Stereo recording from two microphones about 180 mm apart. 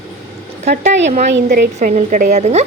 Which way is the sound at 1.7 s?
45° right (ahead or behind).